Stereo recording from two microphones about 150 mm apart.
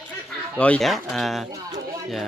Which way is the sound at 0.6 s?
5° left (ahead or behind).